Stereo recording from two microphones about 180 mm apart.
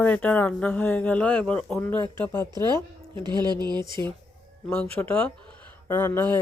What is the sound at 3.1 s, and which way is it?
Speech, 25° right (ahead or behind).